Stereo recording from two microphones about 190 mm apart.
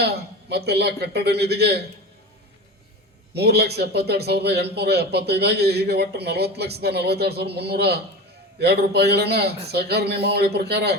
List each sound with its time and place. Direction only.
0.0 s speech: 60° right (ahead or behind)
3.3 s speech: 60° right (ahead or behind)